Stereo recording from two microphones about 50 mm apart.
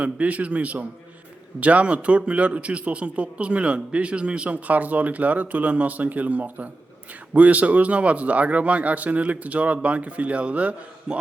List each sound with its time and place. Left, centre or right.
0.0 s a man's voice: right